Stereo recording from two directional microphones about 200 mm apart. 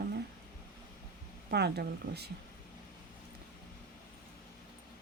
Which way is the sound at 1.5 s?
55° right (ahead or behind).